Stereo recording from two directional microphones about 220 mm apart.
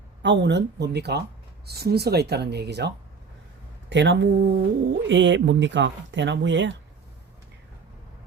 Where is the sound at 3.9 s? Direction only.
55° right (ahead or behind).